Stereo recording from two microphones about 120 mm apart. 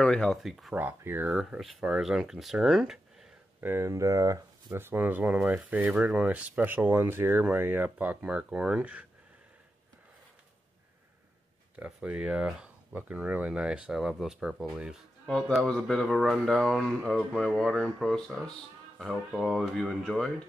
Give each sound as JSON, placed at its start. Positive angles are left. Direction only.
{"t": 0.0, "sound": "speech", "side_deg": 5}
{"t": 0.7, "sound": "speech", "side_deg": -15}
{"t": 1.3, "sound": "speech", "side_deg": -5}
{"t": 3.6, "sound": "speech", "side_deg": -20}
{"t": 11.7, "sound": "speech", "side_deg": -10}
{"t": 15.2, "sound": "speech", "side_deg": 5}